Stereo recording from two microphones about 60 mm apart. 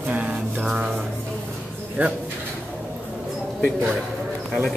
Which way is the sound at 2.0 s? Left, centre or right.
Right.